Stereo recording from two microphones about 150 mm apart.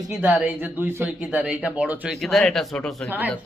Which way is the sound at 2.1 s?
Centre (ahead or behind).